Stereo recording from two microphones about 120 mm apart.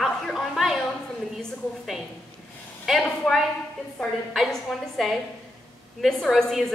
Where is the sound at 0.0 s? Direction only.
Centre (ahead or behind).